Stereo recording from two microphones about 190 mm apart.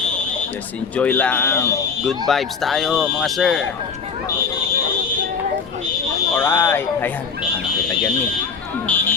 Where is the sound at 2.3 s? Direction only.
Centre (ahead or behind).